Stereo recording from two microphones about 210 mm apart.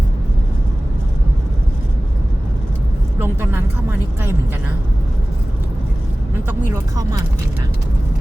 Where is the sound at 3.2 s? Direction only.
10° right (ahead or behind).